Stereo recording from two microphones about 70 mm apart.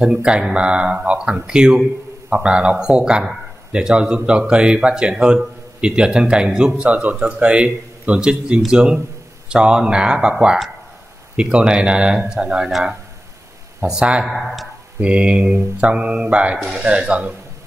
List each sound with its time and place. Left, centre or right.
0.0 s a man's voice: centre
13.8 s speech: centre
14.2 s speech: centre
15.0 s speech: centre
16.5 s speech: centre
16.8 s speech: centre